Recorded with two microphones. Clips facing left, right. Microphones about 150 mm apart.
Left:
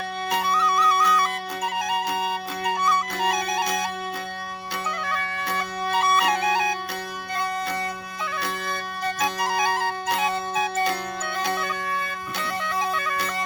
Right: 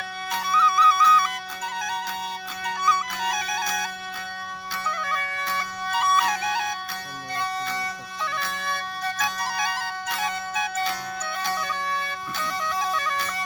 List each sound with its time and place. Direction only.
0.3 s music: 60° left (ahead or behind)
5.5 s music: 60° left (ahead or behind)
9.5 s bagpipes: 50° left (ahead or behind)